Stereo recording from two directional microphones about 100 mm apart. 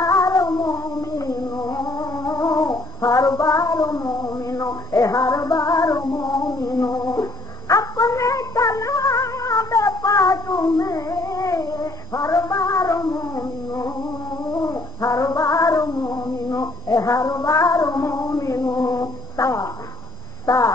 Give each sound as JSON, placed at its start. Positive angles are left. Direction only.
{"t": 0.0, "sound": "music", "side_deg": 35}
{"t": 14.5, "sound": "female singing", "side_deg": 30}
{"t": 20.4, "sound": "a sound", "side_deg": 35}